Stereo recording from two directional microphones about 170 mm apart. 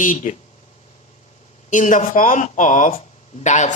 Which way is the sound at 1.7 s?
50° left (ahead or behind).